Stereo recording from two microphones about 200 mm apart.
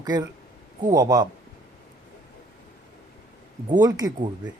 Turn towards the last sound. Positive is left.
turn(degrees=-20)  # may be behind; listen again after turning